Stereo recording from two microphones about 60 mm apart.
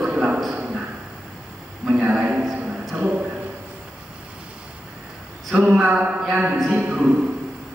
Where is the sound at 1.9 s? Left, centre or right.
Centre.